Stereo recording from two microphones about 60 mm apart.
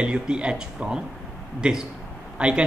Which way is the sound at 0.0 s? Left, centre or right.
Centre.